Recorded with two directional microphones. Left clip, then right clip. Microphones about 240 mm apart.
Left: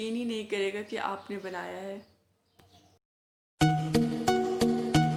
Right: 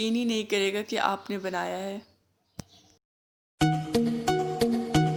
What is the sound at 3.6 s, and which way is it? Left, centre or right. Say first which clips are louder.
Music: right 1 dB; centre.